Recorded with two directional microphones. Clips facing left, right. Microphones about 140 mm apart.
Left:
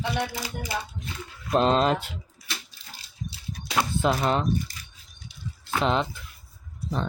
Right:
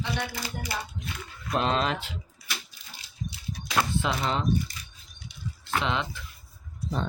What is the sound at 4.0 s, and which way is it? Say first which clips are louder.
Speech: left 5 dB; 45° left (ahead or behind).